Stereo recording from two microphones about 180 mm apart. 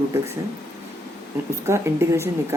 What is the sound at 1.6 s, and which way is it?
Speech, 15° right (ahead or behind).